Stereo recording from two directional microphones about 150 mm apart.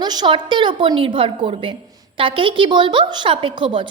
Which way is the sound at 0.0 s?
30° right (ahead or behind).